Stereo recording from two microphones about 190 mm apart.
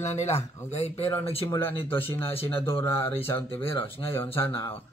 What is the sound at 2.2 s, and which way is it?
Speech, 30° left (ahead or behind).